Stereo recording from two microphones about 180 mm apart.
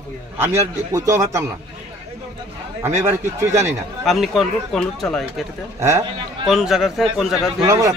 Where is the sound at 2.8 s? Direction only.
15° right (ahead or behind).